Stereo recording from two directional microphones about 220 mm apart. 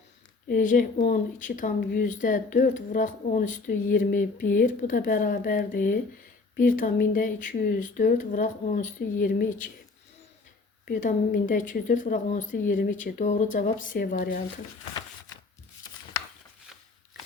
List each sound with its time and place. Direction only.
0.4 s speech: 35° left (ahead or behind)
10.8 s speech: 40° left (ahead or behind)